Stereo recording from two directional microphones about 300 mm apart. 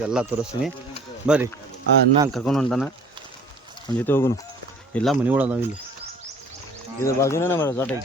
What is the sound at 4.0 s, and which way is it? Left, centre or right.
Speech, centre.